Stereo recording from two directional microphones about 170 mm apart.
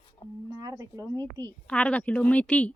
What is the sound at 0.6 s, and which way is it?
Speech, 20° right (ahead or behind).